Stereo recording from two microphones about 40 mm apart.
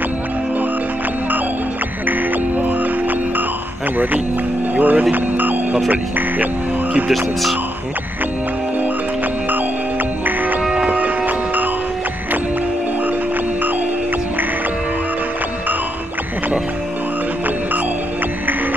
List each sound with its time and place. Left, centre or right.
2.0 s music: right
4.7 s speech: right
5.1 s a sound: right
5.9 s speech: right
10.2 s music: right